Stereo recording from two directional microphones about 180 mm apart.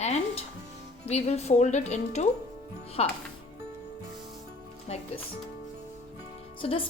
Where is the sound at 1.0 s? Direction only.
35° left (ahead or behind).